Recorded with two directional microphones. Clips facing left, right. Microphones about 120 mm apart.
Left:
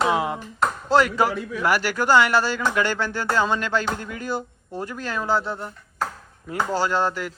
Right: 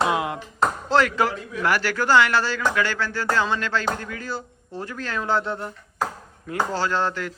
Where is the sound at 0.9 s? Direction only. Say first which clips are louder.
Left 3 dB; 10° left (ahead or behind).